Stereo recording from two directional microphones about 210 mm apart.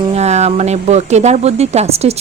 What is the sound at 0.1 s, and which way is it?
A woman's voice, 30° right (ahead or behind).